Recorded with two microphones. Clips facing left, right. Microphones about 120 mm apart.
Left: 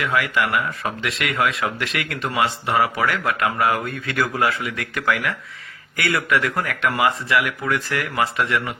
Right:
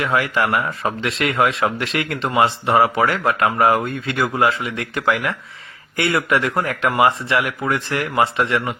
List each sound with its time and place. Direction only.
0.0 s speech: 30° right (ahead or behind)